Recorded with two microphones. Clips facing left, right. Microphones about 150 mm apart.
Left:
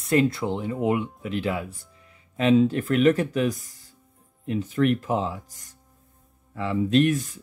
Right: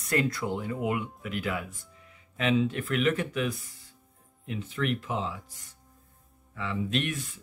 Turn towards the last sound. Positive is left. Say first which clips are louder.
# left 11 dB
turn(degrees=40)  # may be behind; listen again after turning